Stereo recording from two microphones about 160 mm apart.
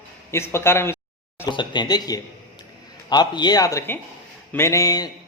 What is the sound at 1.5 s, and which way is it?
A man's voice, 30° left (ahead or behind).